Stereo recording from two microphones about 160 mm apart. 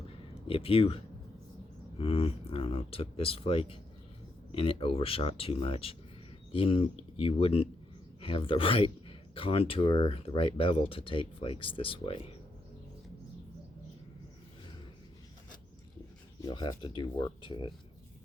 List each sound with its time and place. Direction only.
0.4 s speech: 35° left (ahead or behind)
16.4 s speech: 25° left (ahead or behind)